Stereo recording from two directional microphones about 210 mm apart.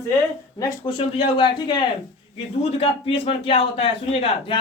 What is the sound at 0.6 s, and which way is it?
A man's voice, 25° left (ahead or behind).